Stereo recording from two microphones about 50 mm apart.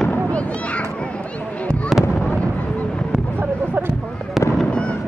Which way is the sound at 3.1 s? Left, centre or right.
Right.